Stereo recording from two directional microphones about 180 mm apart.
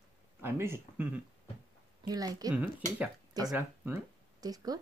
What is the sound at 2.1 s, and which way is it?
Speech, 20° right (ahead or behind).